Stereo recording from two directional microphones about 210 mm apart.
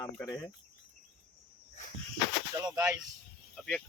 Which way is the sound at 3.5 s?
Centre (ahead or behind).